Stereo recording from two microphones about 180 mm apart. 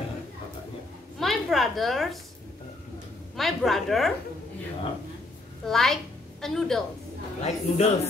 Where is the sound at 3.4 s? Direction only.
Centre (ahead or behind).